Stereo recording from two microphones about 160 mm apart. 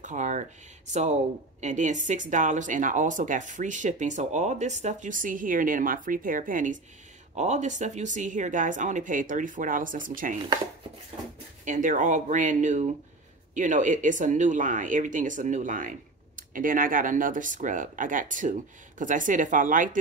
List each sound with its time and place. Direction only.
0.0 s a sound: 50° right (ahead or behind)
1.6 s speech: 50° right (ahead or behind)
11.6 s speech: 55° right (ahead or behind)